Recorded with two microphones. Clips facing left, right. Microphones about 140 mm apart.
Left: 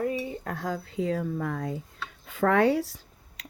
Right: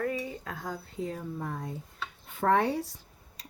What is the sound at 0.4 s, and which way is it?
Speech, 75° left (ahead or behind).